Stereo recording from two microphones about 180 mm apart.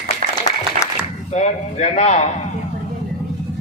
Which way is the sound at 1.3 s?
40° left (ahead or behind).